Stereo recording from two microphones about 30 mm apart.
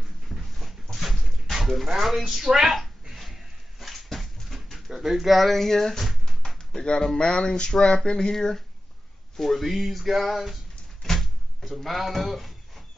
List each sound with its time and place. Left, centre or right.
0.3 s dog: centre
1.2 s a sound: centre
2.0 s speech: centre
2.4 s speech: centre
3.8 s dog: centre
4.9 s speech: centre
5.5 s a sound: centre
6.7 s speech: left
9.4 s speech: centre
11.0 s door: centre
11.7 s speech: centre